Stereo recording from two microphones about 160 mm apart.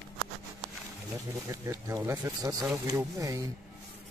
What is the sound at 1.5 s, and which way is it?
Speech, 20° right (ahead or behind).